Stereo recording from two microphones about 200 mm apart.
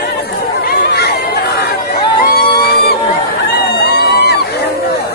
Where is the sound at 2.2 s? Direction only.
50° left (ahead or behind).